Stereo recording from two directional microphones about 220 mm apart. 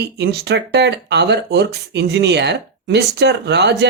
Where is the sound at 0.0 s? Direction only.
50° right (ahead or behind).